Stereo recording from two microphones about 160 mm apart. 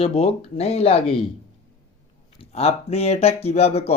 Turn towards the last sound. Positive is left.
turn(degrees=40)  # may be behind; listen again after turning